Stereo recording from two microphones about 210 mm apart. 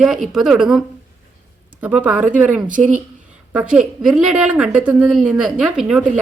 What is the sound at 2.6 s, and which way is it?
Speech, 40° right (ahead or behind).